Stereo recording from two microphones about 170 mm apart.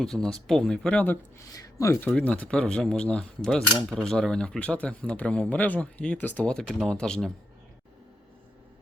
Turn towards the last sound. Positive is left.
turn(degrees=5)  # may be behind; listen again after turning